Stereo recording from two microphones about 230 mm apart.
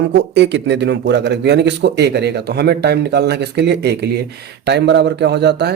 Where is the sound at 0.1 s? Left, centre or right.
Right.